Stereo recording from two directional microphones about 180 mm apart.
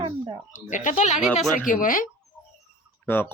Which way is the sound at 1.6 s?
50° left (ahead or behind).